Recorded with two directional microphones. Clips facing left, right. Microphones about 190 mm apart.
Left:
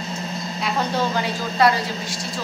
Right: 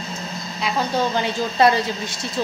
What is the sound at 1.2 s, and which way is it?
A woman's voice, 25° right (ahead or behind).